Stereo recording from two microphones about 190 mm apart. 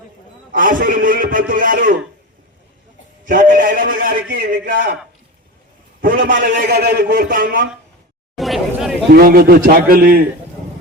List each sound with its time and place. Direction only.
0.5 s a man's voice: 45° right (ahead or behind)
3.2 s a man's voice: 45° right (ahead or behind)
6.4 s a man's voice: 50° right (ahead or behind)
8.4 s a sound: centre (ahead or behind)
9.1 s a man's voice: 50° right (ahead or behind)